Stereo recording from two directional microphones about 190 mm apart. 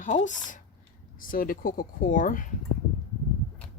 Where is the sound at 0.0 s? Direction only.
40° left (ahead or behind).